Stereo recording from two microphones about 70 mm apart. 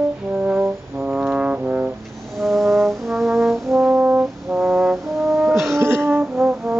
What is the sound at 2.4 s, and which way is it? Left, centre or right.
Brass instrument, centre.